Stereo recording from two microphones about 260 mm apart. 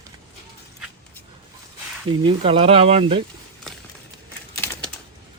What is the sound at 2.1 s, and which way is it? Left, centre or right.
Speech, centre.